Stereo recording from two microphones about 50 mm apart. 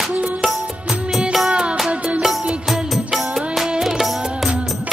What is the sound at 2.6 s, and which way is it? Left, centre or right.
Music, centre.